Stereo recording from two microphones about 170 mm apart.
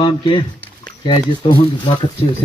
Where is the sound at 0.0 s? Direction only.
35° left (ahead or behind).